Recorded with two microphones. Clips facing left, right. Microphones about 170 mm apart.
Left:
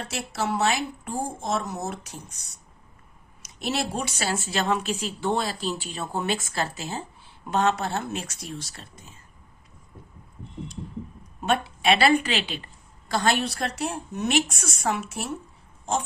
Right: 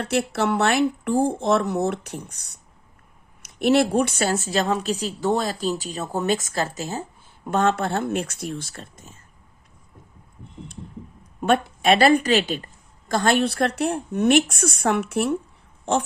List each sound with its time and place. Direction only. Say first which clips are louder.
0.0 s a woman's voice: right 7 dB; 60° right (ahead or behind)
11.3 s a woman's voice: right 5 dB; 50° right (ahead or behind)